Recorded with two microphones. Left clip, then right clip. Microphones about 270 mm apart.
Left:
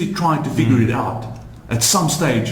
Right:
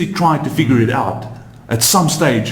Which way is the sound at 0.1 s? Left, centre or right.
Right.